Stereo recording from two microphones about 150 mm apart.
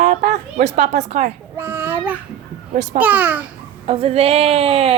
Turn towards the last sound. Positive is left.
turn(degrees=-40)  # may be behind; listen again after turning